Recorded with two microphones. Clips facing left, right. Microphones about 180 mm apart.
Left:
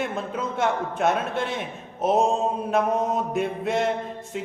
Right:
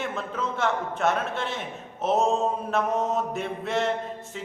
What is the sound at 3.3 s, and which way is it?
Speech, 15° left (ahead or behind).